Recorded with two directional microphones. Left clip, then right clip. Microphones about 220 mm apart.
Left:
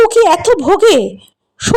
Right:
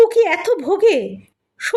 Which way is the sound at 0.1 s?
30° left (ahead or behind).